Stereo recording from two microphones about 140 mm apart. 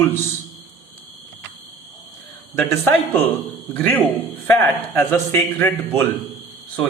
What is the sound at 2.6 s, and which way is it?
A man's voice, 15° left (ahead or behind).